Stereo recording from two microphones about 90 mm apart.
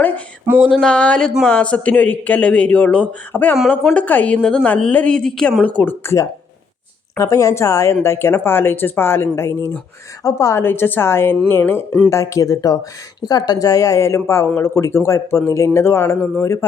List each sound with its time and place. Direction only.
0.6 s a man's voice: 5° left (ahead or behind)
5.6 s speech: 20° left (ahead or behind)
11.9 s a man's voice: 10° left (ahead or behind)
12.1 s speech: 35° left (ahead or behind)